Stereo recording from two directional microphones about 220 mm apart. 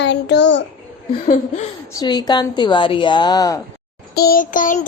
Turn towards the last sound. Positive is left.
turn(degrees=35)  # may be behind; listen again after turning